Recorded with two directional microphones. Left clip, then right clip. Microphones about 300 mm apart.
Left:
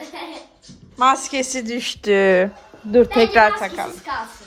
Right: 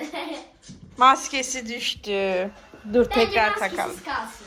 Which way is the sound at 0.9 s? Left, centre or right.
Centre.